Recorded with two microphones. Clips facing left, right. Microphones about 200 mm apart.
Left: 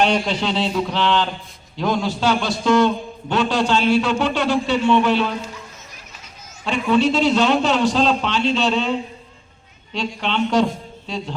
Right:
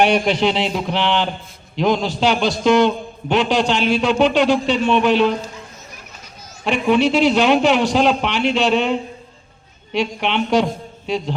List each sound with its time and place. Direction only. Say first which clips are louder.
0.0 s a man's voice: right 4 dB; 15° right (ahead or behind)
6.7 s a man's voice: right 2 dB; 15° right (ahead or behind)